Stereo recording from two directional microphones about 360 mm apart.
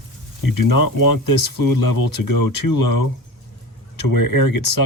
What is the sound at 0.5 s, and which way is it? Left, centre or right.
Speech, left.